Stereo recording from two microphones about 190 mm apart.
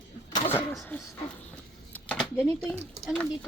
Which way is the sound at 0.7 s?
Centre (ahead or behind).